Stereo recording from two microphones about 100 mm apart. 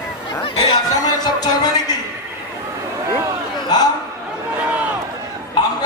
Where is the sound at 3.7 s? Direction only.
40° left (ahead or behind).